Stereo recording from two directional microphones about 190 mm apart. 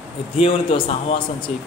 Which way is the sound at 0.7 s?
25° left (ahead or behind).